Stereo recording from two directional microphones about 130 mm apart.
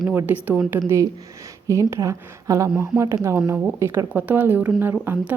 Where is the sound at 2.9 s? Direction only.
10° right (ahead or behind).